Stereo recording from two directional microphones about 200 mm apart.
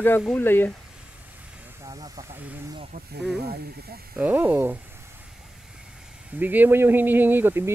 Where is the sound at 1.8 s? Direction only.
20° right (ahead or behind).